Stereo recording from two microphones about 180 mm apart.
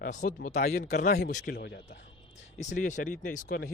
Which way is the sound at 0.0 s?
45° left (ahead or behind).